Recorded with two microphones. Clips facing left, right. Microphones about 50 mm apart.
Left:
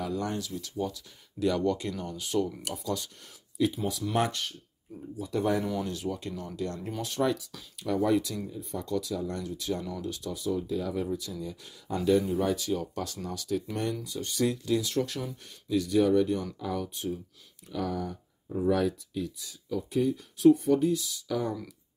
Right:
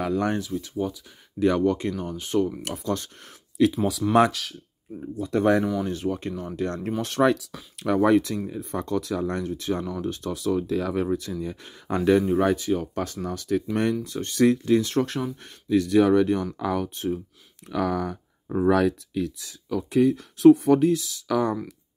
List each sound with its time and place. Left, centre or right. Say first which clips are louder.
0.0 s speech: right 7 dB; right
0.4 s speech: right 5 dB; right
2.6 s speech: right 5 dB; right
3.5 s speech: right 7 dB; right
5.3 s speech: right 7 dB; right
5.9 s speech: right 6 dB; right
6.6 s speech: right 7 dB; right
10.3 s speech: right 6 dB; right
11.4 s speech: right 6 dB; right
12.5 s speech: right 6 dB; right
14.5 s speech: right 7 dB; right
15.7 s speech: right 5 dB; right
17.6 s speech: right 7 dB; right